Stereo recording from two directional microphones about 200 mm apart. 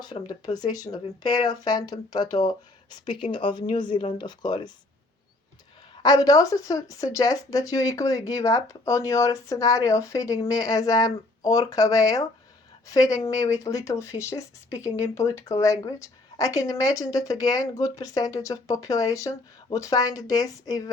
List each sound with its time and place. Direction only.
0.0 s speech: 20° left (ahead or behind)
6.0 s speech: 20° left (ahead or behind)